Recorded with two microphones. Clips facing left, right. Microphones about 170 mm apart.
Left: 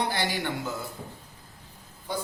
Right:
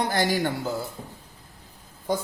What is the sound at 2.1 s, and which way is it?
Speech, 45° right (ahead or behind).